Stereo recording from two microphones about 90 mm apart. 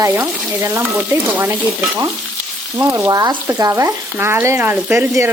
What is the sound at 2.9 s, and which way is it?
Frying, 40° right (ahead or behind).